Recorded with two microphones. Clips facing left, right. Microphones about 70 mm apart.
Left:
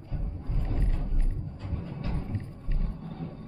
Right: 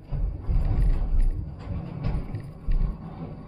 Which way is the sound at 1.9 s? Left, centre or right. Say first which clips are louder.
Right 3 dB; right.